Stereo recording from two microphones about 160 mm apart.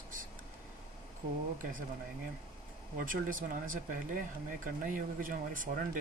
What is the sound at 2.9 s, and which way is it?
Speech, 60° right (ahead or behind).